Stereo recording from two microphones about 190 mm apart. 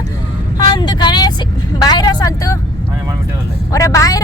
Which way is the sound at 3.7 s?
15° left (ahead or behind).